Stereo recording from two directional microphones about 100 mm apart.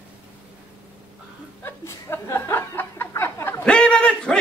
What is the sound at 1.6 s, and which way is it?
Chuckle, 25° left (ahead or behind).